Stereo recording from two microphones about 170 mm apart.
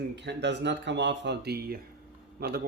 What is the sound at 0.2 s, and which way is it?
Speech, 90° right.